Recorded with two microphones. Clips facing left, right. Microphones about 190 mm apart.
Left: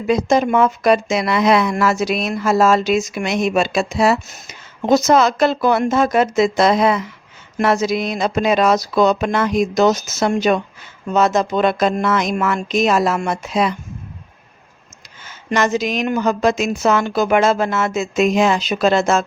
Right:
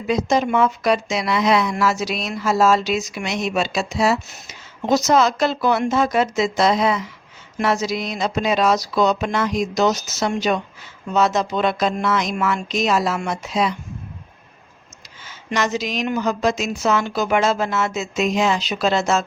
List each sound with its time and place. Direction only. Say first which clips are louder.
0.1 s speech: left 3 dB; 50° left (ahead or behind)
15.4 s speech: left 4 dB; 50° left (ahead or behind)